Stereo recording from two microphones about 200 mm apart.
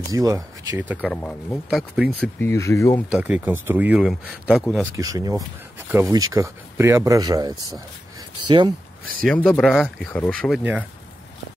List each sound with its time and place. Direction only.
0.1 s speech: 15° right (ahead or behind)
1.0 s speech: 5° left (ahead or behind)
3.1 s speech: 5° right (ahead or behind)
4.9 s speech: 15° right (ahead or behind)
9.2 s speech: 5° left (ahead or behind)
10.6 s speech: 10° right (ahead or behind)